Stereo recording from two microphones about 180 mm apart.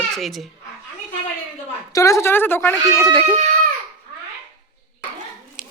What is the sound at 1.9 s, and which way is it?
A woman's voice, 15° left (ahead or behind).